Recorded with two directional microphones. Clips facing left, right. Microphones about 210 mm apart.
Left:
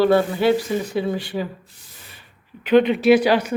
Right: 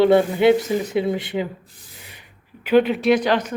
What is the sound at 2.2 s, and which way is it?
Speech, 10° right (ahead or behind).